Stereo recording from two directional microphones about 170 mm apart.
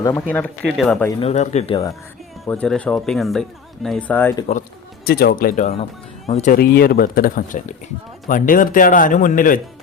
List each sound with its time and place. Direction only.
0.3 s speech: 10° left (ahead or behind)
1.2 s speech: 40° left (ahead or behind)
2.5 s speech: 5° left (ahead or behind)
5.0 s speech: 65° left (ahead or behind)
6.2 s speech: 40° left (ahead or behind)
6.5 s speech: 60° left (ahead or behind)